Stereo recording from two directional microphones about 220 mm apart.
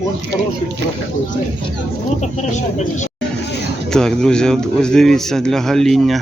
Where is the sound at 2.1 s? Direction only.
30° left (ahead or behind).